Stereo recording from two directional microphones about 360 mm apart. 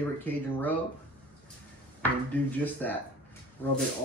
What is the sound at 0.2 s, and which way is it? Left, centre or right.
Speech, centre.